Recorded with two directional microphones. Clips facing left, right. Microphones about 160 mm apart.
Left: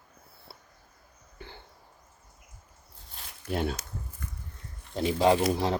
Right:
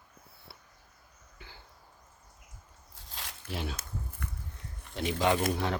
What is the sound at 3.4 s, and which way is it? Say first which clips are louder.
Speech: left 8 dB; 50° left (ahead or behind).